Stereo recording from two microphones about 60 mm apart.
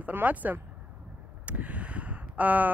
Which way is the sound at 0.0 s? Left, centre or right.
Right.